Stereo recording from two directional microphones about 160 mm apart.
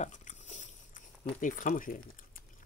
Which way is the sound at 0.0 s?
50° left (ahead or behind).